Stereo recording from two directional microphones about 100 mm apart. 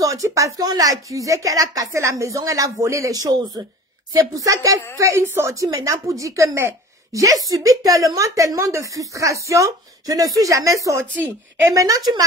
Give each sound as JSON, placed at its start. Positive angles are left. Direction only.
{"t": 0.0, "sound": "a woman's voice", "side_deg": -35}
{"t": 11.1, "sound": "a woman's voice", "side_deg": -20}